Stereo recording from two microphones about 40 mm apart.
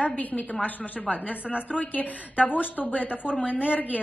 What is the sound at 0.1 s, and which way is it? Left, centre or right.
Speech, left.